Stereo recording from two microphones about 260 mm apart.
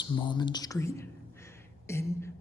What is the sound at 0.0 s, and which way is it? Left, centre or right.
Speech, centre.